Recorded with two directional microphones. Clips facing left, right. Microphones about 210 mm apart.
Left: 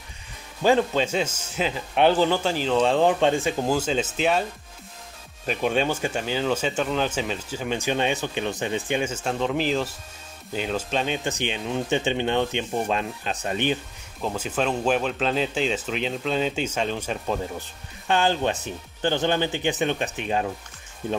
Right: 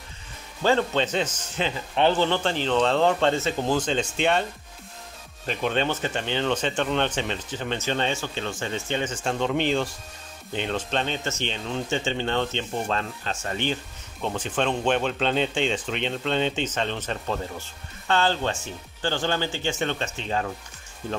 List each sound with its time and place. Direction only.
0.6 s speech: 10° left (ahead or behind)
5.5 s speech: 10° left (ahead or behind)